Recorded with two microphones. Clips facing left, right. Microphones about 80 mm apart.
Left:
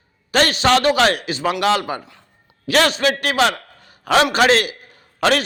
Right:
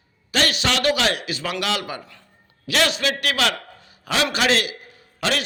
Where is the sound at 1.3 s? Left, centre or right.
Left.